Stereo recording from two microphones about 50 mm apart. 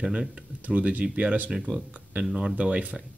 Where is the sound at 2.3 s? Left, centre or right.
Centre.